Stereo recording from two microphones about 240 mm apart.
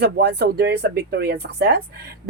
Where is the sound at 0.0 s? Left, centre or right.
Right.